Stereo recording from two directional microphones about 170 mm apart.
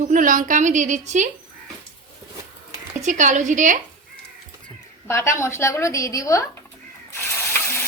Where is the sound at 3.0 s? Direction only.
45° right (ahead or behind).